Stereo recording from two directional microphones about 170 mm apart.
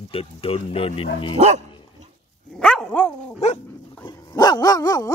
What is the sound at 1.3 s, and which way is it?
Dog, 40° right (ahead or behind).